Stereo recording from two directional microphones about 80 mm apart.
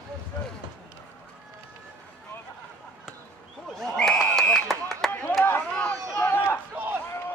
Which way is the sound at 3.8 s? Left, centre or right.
Centre.